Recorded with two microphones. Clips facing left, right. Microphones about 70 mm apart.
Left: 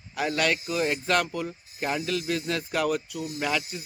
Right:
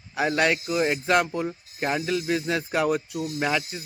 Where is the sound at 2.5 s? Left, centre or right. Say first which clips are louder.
Right 2 dB; right.